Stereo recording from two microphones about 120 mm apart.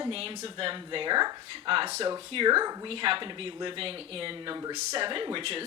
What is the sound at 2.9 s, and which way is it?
Speech, 50° right (ahead or behind).